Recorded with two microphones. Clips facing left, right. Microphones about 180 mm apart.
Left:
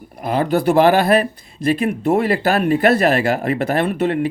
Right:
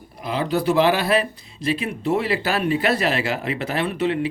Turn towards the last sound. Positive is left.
turn(degrees=50)  # may be behind; listen again after turning